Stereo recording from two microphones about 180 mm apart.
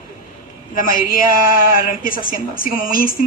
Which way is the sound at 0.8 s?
50° left (ahead or behind).